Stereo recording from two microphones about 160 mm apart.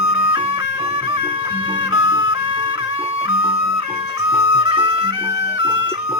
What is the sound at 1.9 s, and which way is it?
Music, 30° right (ahead or behind).